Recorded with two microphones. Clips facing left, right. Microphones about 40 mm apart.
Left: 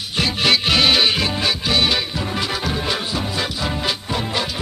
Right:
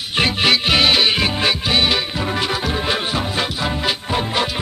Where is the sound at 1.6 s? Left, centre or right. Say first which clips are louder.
Right 1 dB; centre.